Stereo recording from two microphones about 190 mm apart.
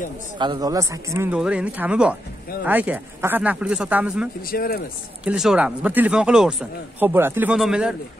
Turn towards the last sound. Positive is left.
turn(degrees=-5)  # may be behind; listen again after turning